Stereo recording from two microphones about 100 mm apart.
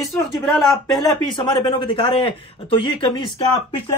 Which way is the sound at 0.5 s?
Centre (ahead or behind).